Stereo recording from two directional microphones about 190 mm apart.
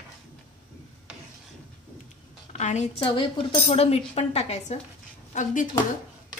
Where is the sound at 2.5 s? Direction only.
35° left (ahead or behind).